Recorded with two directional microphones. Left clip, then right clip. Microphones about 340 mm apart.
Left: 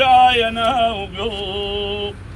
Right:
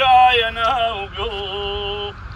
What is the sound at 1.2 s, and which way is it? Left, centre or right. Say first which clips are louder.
Speech: left 2 dB; right.